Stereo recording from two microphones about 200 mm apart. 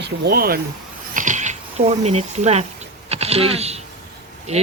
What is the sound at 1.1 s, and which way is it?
Cat, 40° right (ahead or behind).